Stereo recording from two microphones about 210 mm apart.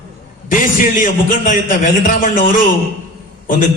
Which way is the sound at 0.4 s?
40° left (ahead or behind).